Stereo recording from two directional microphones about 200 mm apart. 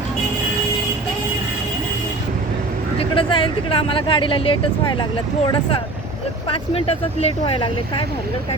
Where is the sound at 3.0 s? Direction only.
25° left (ahead or behind).